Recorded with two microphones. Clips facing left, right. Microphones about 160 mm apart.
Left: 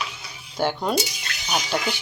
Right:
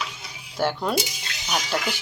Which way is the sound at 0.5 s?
Centre (ahead or behind).